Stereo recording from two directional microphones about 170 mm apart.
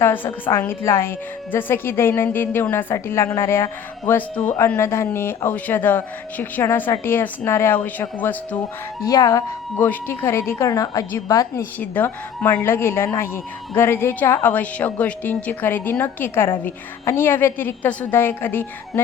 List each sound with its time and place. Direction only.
0.0 s speech: 15° left (ahead or behind)